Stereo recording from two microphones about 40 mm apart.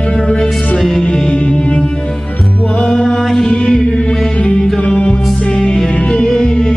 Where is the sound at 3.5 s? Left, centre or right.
Centre.